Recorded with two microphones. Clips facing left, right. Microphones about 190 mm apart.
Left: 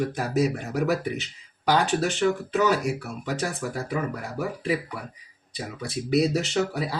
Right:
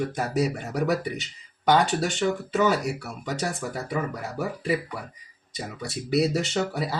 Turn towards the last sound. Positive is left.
turn(degrees=0)  # may be behind; listen again after turning